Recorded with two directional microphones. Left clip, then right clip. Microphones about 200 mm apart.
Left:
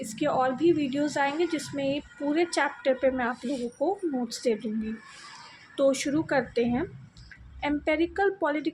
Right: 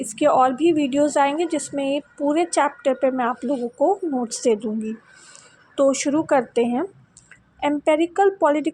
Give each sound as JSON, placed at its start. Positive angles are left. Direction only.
{"t": 0.0, "sound": "a woman's voice", "side_deg": -25}
{"t": 5.7, "sound": "a woman's voice", "side_deg": -25}